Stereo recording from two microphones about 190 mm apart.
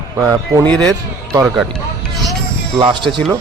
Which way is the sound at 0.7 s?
5° left (ahead or behind).